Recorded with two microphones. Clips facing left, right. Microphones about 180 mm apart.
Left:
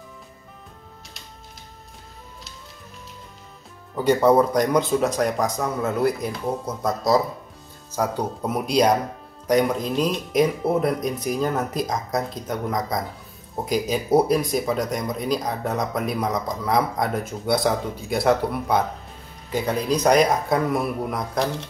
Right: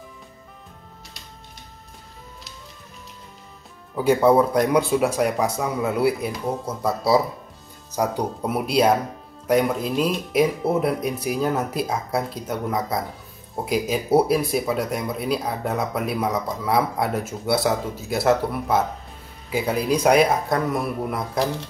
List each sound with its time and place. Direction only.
3.9 s speech: 5° right (ahead or behind)